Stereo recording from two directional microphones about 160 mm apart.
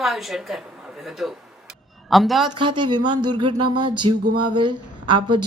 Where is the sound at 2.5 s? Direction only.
30° right (ahead or behind).